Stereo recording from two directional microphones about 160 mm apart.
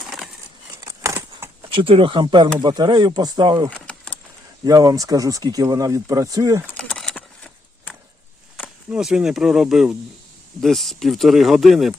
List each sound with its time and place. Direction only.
0.8 s a sound: 20° right (ahead or behind)
1.7 s speech: 35° right (ahead or behind)
3.8 s keys jangling: 5° left (ahead or behind)
4.6 s speech: 25° right (ahead or behind)
6.7 s a sound: 5° left (ahead or behind)
8.9 s speech: 5° right (ahead or behind)